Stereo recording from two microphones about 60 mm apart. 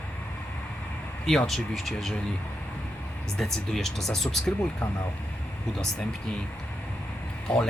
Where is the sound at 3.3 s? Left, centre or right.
Centre.